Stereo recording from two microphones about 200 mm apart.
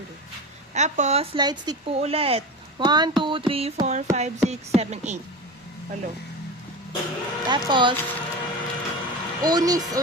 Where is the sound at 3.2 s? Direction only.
25° right (ahead or behind).